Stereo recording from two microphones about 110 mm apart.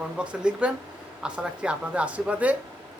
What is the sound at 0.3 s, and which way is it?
Speech, 10° right (ahead or behind).